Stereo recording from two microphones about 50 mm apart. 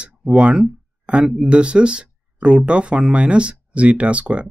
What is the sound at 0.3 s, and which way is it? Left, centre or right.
Speech, right.